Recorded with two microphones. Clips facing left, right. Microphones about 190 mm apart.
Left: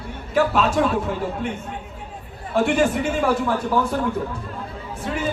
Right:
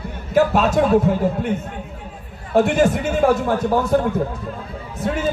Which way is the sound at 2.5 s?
40° right (ahead or behind).